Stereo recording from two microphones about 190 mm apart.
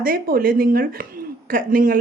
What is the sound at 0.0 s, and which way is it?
Speech, 50° right (ahead or behind).